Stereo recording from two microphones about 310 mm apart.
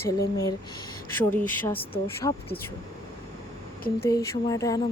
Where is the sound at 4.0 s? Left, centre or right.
Centre.